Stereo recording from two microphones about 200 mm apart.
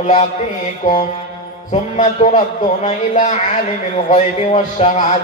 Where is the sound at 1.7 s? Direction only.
35° left (ahead or behind).